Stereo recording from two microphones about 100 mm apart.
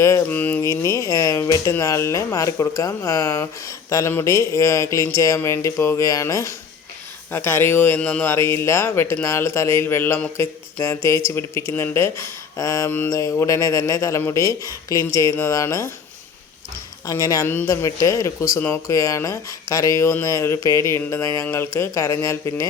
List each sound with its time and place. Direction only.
0.2 s speech: 20° left (ahead or behind)
0.7 s speech: 30° left (ahead or behind)
17.1 s speech: 35° left (ahead or behind)
17.4 s speech: 20° left (ahead or behind)
17.7 s speech: 35° left (ahead or behind)